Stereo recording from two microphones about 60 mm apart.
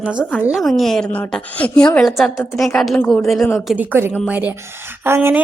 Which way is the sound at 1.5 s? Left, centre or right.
Left.